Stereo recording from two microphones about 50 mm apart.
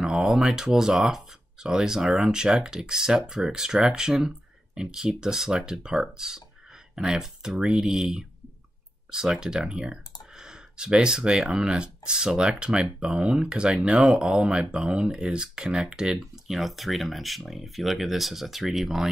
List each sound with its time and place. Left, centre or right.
0.0 s speech: centre
16.5 s speech: centre